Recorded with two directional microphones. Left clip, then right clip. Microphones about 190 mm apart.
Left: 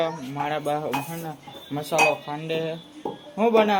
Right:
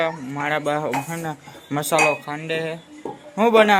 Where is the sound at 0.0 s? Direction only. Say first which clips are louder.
Right 3 dB; 10° right (ahead or behind).